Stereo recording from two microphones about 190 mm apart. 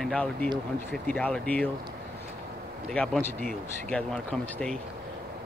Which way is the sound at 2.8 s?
5° left (ahead or behind).